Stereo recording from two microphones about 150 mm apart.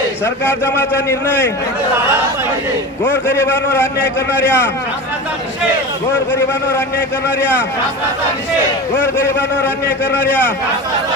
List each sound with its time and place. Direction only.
0.4 s a man's voice: 15° left (ahead or behind)
3.0 s a man's voice: 15° left (ahead or behind)
9.0 s a man's voice: 15° left (ahead or behind)